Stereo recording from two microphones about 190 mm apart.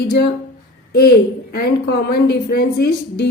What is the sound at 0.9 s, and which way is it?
A woman's voice, 55° left (ahead or behind).